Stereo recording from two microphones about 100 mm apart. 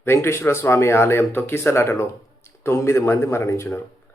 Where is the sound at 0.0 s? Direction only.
25° left (ahead or behind).